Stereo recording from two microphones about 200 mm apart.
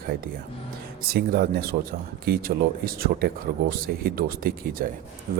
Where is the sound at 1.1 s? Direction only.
50° right (ahead or behind).